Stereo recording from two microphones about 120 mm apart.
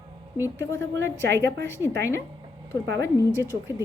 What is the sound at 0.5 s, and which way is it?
Speech, 20° left (ahead or behind).